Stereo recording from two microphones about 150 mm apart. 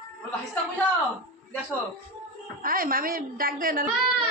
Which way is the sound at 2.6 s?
75° right (ahead or behind).